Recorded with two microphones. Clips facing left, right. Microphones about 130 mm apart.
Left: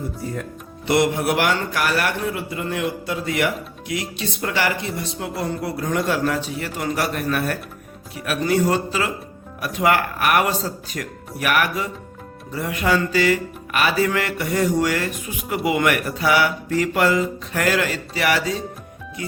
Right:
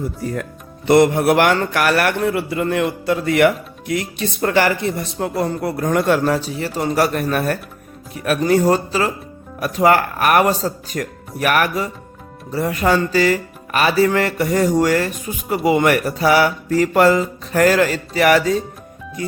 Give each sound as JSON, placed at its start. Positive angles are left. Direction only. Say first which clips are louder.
{"t": 0.9, "sound": "a man's voice", "louder": "right 6 dB", "side_deg": -50}
{"t": 6.2, "sound": "speech", "louder": "right 4 dB", "side_deg": -35}